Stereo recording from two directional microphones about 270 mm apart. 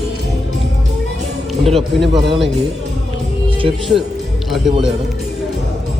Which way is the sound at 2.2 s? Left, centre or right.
Centre.